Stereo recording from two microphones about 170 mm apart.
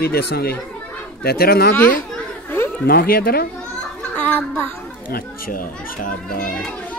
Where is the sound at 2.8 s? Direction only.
60° left (ahead or behind).